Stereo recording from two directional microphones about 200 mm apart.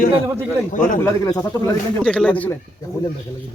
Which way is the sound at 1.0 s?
15° left (ahead or behind).